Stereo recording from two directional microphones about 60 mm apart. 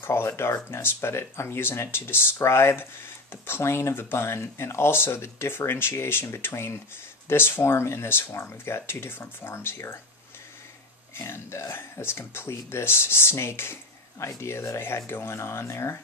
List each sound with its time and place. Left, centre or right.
0.0 s speech: left
11.1 s speech: left